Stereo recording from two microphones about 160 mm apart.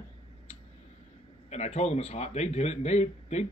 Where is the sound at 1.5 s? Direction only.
45° left (ahead or behind).